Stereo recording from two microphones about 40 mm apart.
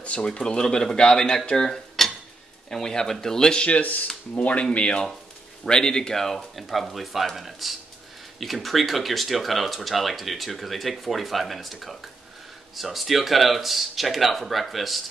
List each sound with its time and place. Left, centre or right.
0.0 s speech: left
1.7 s cutlery: centre
2.7 s speech: centre
4.4 s speech: left
5.7 s speech: centre